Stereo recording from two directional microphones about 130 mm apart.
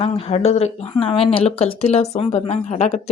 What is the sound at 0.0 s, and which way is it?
Speech, 50° left (ahead or behind).